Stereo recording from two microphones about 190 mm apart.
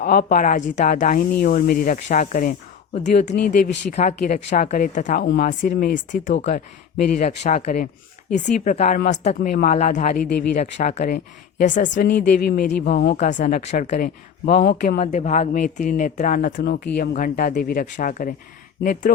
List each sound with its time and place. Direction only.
0.0 s speech: 50° left (ahead or behind)
12.3 s speech: 55° left (ahead or behind)
13.1 s speech: 45° left (ahead or behind)
14.4 s speech: 55° left (ahead or behind)
14.8 s speech: 40° left (ahead or behind)